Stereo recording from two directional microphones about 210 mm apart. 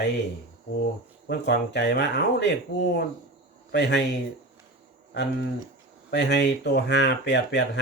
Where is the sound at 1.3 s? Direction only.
55° left (ahead or behind).